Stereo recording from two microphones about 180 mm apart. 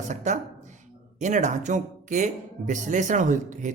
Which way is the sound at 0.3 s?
40° right (ahead or behind).